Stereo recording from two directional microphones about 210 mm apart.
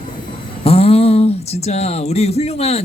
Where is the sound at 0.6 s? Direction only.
30° left (ahead or behind).